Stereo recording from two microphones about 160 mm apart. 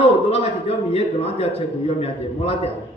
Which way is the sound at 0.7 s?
40° left (ahead or behind).